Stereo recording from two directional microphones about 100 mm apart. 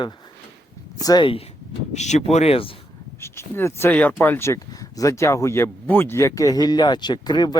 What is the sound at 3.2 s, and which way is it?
Speech, 25° left (ahead or behind).